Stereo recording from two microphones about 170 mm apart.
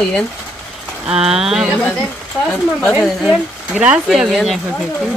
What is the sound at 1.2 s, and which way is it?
Speech, 5° right (ahead or behind).